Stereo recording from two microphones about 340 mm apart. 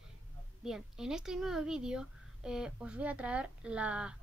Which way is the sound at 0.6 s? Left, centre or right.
Centre.